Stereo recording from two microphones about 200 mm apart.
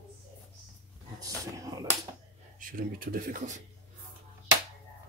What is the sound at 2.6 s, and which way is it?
Speech, 45° right (ahead or behind).